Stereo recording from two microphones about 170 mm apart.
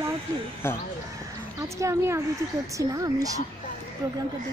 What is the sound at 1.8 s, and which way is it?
Speech, 15° right (ahead or behind).